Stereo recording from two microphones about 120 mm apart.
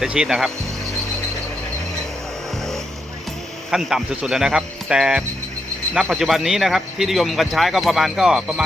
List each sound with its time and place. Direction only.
0.0 s a man's voice: 5° right (ahead or behind)
3.7 s a man's voice: 5° right (ahead or behind)